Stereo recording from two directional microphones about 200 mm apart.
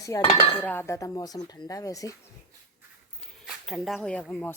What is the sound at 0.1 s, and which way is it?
Speech, 15° left (ahead or behind).